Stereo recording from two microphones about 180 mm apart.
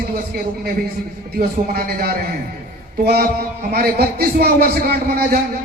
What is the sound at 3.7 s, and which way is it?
A man's voice, 60° right (ahead or behind).